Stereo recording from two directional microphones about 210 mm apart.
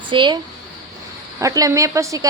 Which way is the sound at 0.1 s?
25° right (ahead or behind).